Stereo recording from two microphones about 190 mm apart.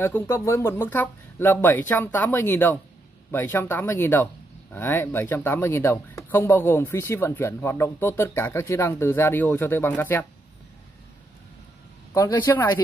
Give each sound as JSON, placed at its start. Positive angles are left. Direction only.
{"t": 0.0, "sound": "speech", "side_deg": 10}
{"t": 12.1, "sound": "speech", "side_deg": 15}